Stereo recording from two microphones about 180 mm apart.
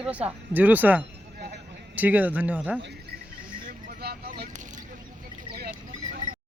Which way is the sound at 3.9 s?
60° right (ahead or behind).